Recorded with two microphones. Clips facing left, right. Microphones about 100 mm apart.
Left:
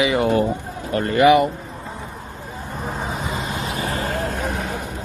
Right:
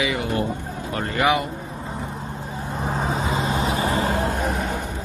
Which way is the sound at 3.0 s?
35° right (ahead or behind).